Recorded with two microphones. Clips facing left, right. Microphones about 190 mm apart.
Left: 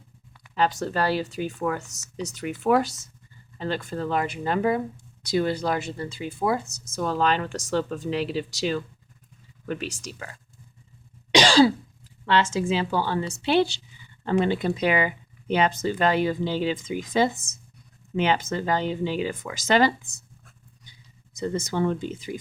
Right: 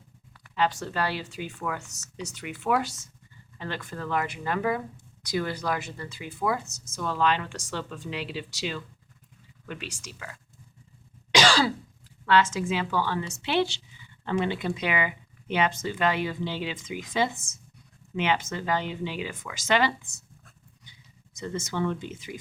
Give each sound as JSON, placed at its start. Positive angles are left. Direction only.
{"t": 0.5, "sound": "speech", "side_deg": 40}
{"t": 11.3, "sound": "cough", "side_deg": 25}
{"t": 12.2, "sound": "a woman's voice", "side_deg": 30}
{"t": 21.3, "sound": "speech", "side_deg": 35}